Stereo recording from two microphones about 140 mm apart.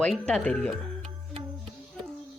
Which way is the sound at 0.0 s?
5° left (ahead or behind).